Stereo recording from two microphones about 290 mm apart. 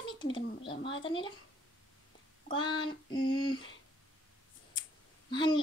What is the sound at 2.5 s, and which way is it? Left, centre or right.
A child's voice, centre.